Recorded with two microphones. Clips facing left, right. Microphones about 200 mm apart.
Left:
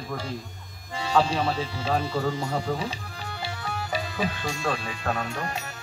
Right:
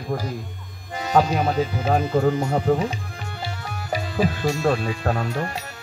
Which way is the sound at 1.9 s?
50° right (ahead or behind).